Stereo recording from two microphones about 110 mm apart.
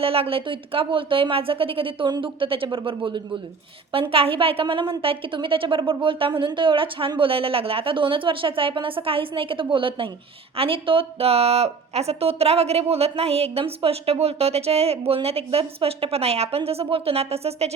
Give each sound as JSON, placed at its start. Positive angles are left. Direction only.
{"t": 0.0, "sound": "a woman's voice", "side_deg": -60}